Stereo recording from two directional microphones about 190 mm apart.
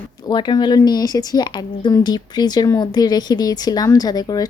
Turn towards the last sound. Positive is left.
turn(degrees=20)  # may be behind; listen again after turning